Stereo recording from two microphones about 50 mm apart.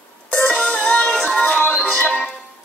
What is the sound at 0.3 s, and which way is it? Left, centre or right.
Music, left.